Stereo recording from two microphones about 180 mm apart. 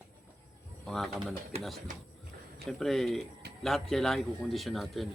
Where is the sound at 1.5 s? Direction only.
35° right (ahead or behind).